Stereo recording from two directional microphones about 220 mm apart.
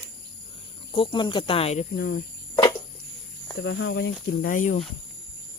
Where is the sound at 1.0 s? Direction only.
20° left (ahead or behind).